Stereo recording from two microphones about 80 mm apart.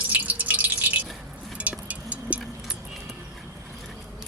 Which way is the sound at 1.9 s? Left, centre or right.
Centre.